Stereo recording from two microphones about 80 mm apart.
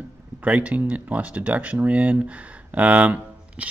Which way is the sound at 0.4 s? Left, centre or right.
Centre.